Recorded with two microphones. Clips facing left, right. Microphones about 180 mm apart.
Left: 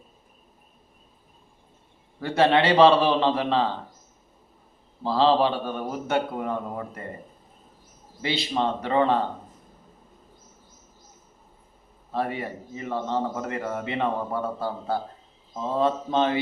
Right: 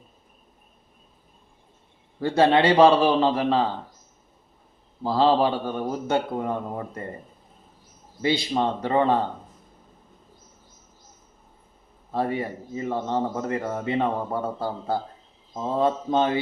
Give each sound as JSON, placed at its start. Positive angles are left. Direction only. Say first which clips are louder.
{"t": 2.2, "sound": "a man's voice", "louder": "right 2 dB", "side_deg": -20}
{"t": 5.0, "sound": "a man's voice", "louder": "right 1 dB", "side_deg": -20}
{"t": 8.2, "sound": "a man's voice", "louder": "right 3 dB", "side_deg": -15}
{"t": 12.4, "sound": "a man's voice", "louder": "right 4 dB", "side_deg": -20}